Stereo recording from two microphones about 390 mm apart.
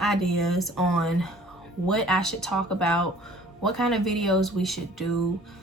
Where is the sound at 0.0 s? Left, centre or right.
Centre.